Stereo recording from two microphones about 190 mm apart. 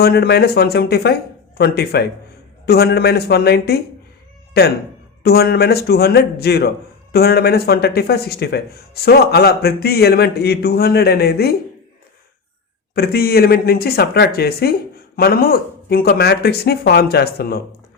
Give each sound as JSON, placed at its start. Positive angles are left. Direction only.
{"t": 0.0, "sound": "speech", "side_deg": 55}
{"t": 12.9, "sound": "speech", "side_deg": 55}